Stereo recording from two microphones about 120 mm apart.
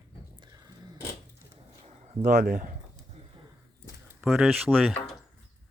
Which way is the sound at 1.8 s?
85° right.